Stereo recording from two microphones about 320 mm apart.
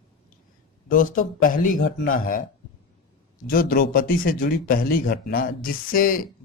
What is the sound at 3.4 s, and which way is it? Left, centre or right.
Speech, left.